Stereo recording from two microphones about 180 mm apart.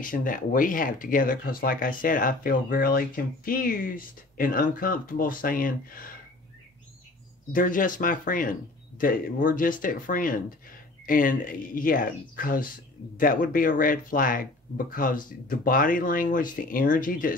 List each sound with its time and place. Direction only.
0.0 s speech: 50° left (ahead or behind)
7.5 s speech: 50° left (ahead or behind)